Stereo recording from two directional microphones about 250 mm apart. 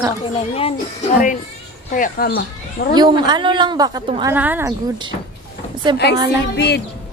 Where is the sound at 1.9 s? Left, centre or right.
Left.